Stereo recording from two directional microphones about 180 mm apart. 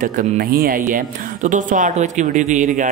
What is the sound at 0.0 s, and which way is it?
A man's voice, 50° right (ahead or behind).